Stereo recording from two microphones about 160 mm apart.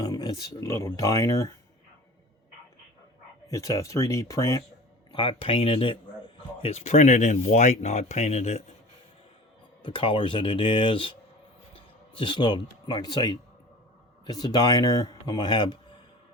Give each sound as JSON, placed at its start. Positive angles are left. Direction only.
{"t": 0.0, "sound": "speech", "side_deg": 25}
{"t": 3.4, "sound": "speech", "side_deg": 20}
{"t": 5.1, "sound": "speech", "side_deg": 30}
{"t": 9.8, "sound": "speech", "side_deg": 30}